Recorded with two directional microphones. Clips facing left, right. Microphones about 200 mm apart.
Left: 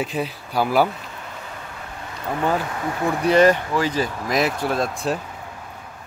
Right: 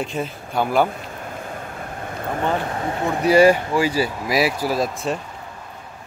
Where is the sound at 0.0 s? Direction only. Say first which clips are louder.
Left 1 dB; centre (ahead or behind).